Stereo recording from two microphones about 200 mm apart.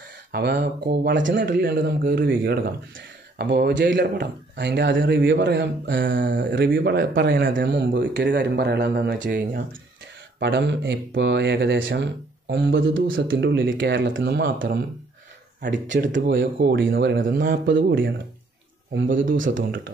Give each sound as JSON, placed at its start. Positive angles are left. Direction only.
{"t": 0.3, "sound": "speech", "side_deg": -60}
{"t": 1.4, "sound": "speech", "side_deg": -50}
{"t": 7.2, "sound": "speech", "side_deg": -65}
{"t": 10.4, "sound": "speech", "side_deg": -60}
{"t": 16.1, "sound": "speech", "side_deg": -60}
{"t": 17.2, "sound": "speech", "side_deg": -45}
{"t": 19.0, "sound": "speech", "side_deg": -40}